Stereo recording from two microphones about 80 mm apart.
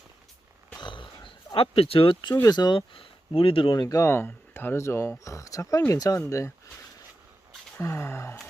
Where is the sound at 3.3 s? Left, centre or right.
Left.